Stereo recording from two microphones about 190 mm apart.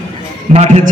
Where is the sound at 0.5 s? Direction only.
40° right (ahead or behind).